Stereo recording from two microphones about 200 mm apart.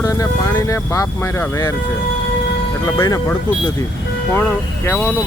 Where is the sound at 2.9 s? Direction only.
20° left (ahead or behind).